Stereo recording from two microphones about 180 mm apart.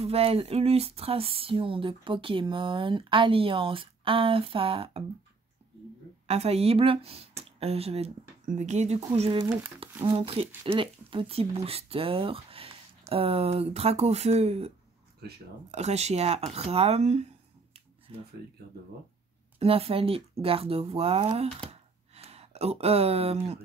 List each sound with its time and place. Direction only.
0.0 s speech: 35° right (ahead or behind)
6.2 s speech: 35° right (ahead or behind)
15.2 s speech: 65° right (ahead or behind)
15.7 s speech: 40° right (ahead or behind)
19.6 s speech: 30° right (ahead or behind)
21.6 s a sound: 35° right (ahead or behind)